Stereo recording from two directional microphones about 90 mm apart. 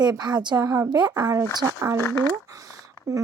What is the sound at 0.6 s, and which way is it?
Speech, 40° right (ahead or behind).